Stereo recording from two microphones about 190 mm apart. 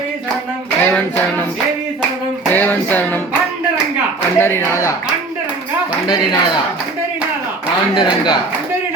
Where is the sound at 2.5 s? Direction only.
10° left (ahead or behind).